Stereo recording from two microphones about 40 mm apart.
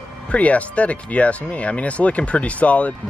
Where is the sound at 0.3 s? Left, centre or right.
Left.